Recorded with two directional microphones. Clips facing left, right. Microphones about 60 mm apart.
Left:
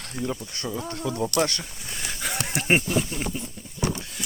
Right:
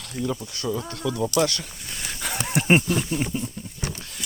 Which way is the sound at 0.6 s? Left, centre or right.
Left.